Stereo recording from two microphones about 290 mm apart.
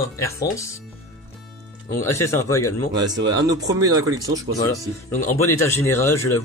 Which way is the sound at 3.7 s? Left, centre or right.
Centre.